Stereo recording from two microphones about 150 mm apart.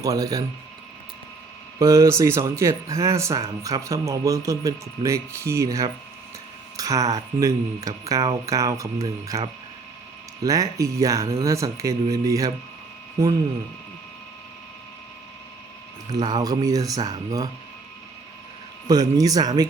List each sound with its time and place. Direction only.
0.0 s speech: 25° right (ahead or behind)
1.8 s speech: 20° right (ahead or behind)
16.0 s speech: 25° right (ahead or behind)
18.9 s speech: 25° right (ahead or behind)